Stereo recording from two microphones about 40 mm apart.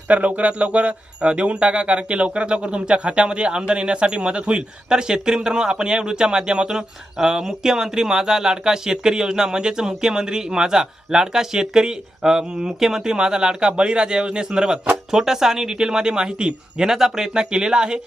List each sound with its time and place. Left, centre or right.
0.1 s speech: right